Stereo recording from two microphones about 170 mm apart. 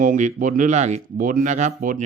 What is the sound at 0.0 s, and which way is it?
Speech, 50° right (ahead or behind).